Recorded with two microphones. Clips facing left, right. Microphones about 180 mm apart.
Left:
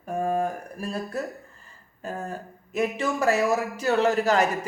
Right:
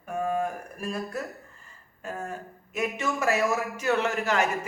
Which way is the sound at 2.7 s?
35° left (ahead or behind).